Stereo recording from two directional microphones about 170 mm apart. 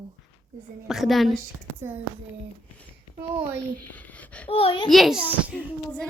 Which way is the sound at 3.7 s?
10° left (ahead or behind).